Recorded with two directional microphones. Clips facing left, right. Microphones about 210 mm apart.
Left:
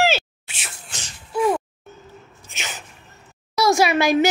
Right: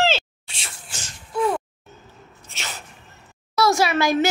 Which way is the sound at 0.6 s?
5° left (ahead or behind).